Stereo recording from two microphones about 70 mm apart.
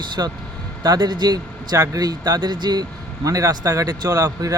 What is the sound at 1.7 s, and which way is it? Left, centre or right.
Speech, right.